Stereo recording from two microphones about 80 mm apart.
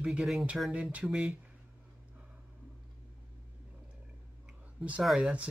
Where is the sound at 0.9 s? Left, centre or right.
Centre.